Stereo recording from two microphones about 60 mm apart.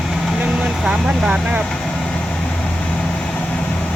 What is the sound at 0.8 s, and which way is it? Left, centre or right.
Speech, centre.